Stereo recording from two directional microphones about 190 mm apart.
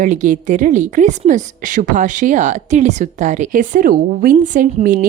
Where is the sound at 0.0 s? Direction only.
40° right (ahead or behind).